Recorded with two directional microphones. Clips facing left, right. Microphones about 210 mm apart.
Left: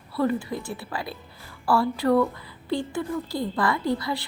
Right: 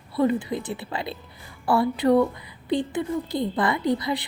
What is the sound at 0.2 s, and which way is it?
A woman's voice, 20° right (ahead or behind).